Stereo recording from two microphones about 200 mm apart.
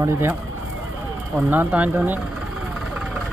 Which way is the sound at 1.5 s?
10° right (ahead or behind).